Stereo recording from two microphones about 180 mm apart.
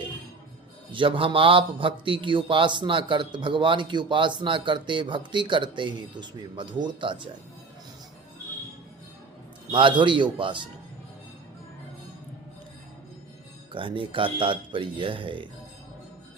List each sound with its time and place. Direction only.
0.9 s a man's voice: 30° right (ahead or behind)
9.7 s a man's voice: 25° right (ahead or behind)
13.7 s a man's voice: 30° right (ahead or behind)